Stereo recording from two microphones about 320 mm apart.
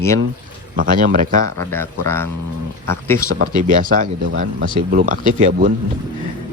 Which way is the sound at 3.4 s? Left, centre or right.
Right.